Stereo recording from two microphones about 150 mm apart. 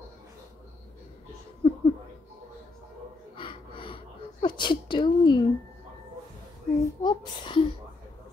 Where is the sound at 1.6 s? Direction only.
35° left (ahead or behind).